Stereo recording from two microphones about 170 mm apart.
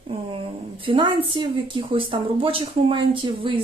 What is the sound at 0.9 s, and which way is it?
A woman's voice, 30° right (ahead or behind).